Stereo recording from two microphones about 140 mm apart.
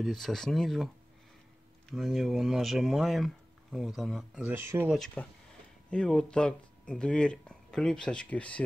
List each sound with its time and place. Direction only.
0.0 s speech: centre (ahead or behind)
1.9 s speech: centre (ahead or behind)
4.5 s speech: 15° right (ahead or behind)
4.8 s speech: 5° left (ahead or behind)